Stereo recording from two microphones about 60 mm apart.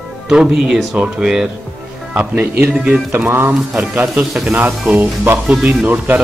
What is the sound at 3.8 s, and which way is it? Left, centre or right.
Speech, right.